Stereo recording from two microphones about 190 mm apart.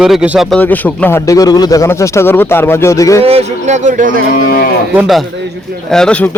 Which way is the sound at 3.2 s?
35° right (ahead or behind).